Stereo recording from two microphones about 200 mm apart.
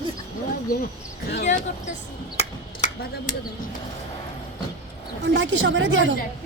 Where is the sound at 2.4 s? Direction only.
35° left (ahead or behind).